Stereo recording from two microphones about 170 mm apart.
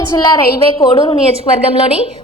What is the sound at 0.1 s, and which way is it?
Speech, 20° left (ahead or behind).